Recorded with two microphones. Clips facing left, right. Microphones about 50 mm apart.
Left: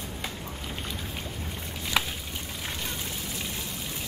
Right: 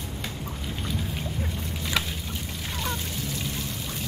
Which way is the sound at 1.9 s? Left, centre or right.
Centre.